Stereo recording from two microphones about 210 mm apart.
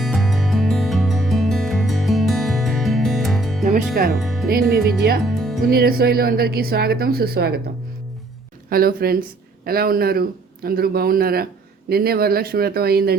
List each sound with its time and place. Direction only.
0.0 s music: centre (ahead or behind)
3.6 s music: 45° right (ahead or behind)
4.2 s music: centre (ahead or behind)
4.4 s speech: 45° right (ahead or behind)
5.2 s music: centre (ahead or behind)
5.6 s speech: 45° right (ahead or behind)
8.7 s speech: 45° right (ahead or behind)